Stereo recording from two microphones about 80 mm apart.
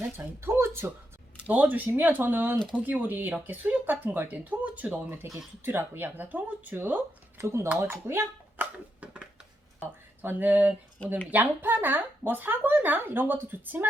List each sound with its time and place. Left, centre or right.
0.2 s speech: right
2.6 s speech: centre
2.8 s speech: right
8.5 s a sound: centre
10.2 s speech: right